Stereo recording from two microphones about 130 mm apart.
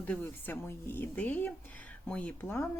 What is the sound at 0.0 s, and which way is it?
Speech, 15° left (ahead or behind).